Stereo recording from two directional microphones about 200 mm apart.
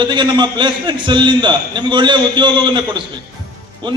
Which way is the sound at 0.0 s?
25° right (ahead or behind).